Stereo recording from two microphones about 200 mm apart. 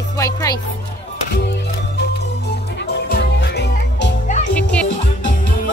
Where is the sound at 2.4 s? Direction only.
55° left (ahead or behind).